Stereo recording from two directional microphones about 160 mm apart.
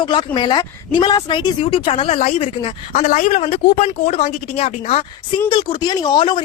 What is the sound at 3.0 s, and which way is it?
A woman's voice, 55° left (ahead or behind).